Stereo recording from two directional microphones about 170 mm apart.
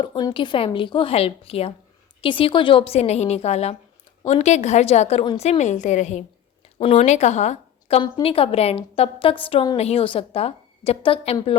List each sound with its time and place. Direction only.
0.0 s a woman's voice: 25° left (ahead or behind)